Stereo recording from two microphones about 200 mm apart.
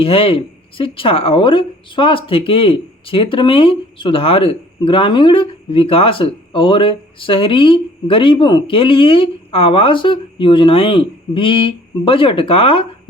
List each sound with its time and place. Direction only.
0.0 s a woman's voice: 25° left (ahead or behind)